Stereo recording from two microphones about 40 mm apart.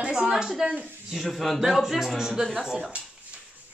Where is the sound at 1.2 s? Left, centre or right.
Centre.